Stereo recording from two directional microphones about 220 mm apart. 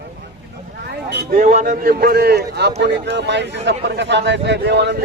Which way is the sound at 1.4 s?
35° right (ahead or behind).